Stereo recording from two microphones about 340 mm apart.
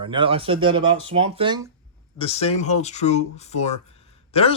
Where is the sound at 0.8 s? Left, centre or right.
Right.